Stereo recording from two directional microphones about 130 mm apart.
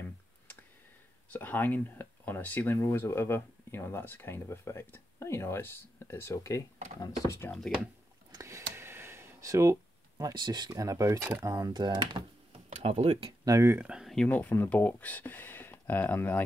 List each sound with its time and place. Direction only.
1.3 s speech: 15° left (ahead or behind)
8.3 s a sound: 25° right (ahead or behind)
11.4 s speech: 25° right (ahead or behind)
12.7 s speech: 55° right (ahead or behind)
13.5 s speech: 25° right (ahead or behind)
13.7 s speech: 5° right (ahead or behind)
14.1 s speech: 10° left (ahead or behind)